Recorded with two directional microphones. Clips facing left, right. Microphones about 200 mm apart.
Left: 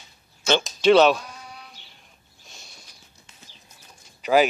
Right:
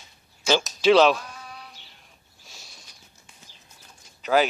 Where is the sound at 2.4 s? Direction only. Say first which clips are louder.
Left 1 dB; 5° right (ahead or behind).